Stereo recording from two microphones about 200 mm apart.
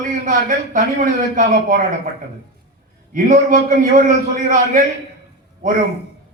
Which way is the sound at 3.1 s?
40° right (ahead or behind).